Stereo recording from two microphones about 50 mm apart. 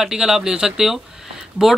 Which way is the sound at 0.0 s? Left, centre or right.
Centre.